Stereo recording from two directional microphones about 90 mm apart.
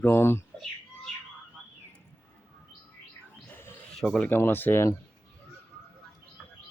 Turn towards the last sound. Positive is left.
turn(degrees=30)  # may be behind; listen again after turning